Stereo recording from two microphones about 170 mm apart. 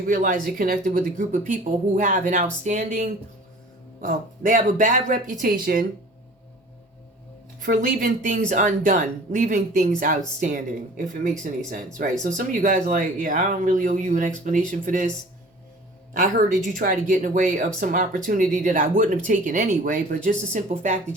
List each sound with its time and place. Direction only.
0.1 s speech: 55° right (ahead or behind)
7.6 s speech: 55° right (ahead or behind)
16.1 s speech: 45° right (ahead or behind)